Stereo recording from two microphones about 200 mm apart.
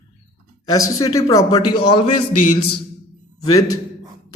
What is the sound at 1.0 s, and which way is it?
A man's voice, 20° left (ahead or behind).